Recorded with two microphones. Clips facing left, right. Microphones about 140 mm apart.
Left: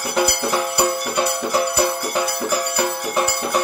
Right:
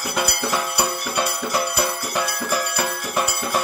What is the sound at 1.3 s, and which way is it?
Music, 30° left (ahead or behind).